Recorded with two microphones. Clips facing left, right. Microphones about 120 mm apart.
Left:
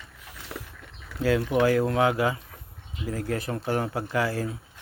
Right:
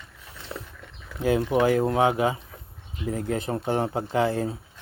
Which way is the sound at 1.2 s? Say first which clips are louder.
Right 1 dB; 20° right (ahead or behind).